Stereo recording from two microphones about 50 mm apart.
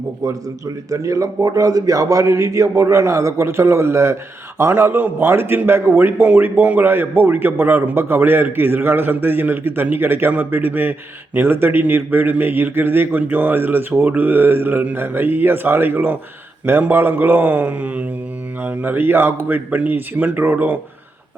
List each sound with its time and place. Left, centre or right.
2.2 s a man's voice: right
4.7 s a man's voice: right